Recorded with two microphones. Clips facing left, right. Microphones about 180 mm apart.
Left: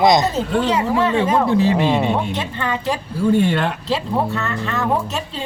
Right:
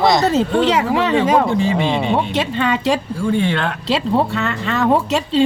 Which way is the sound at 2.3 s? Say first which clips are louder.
Right 5 dB; 80° right.